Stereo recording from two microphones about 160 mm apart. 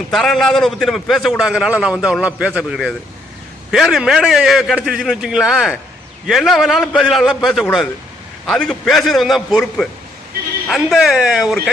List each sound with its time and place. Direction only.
0.1 s a man's voice: centre (ahead or behind)